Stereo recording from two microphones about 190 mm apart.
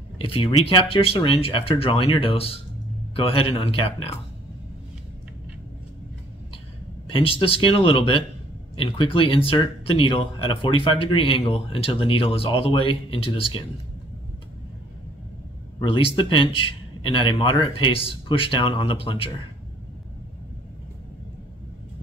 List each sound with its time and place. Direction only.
0.2 s speech: 25° left (ahead or behind)
7.1 s speech: 30° left (ahead or behind)
15.8 s speech: 25° left (ahead or behind)